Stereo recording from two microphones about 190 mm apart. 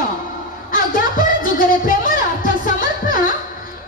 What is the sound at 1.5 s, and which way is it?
Music, 45° left (ahead or behind).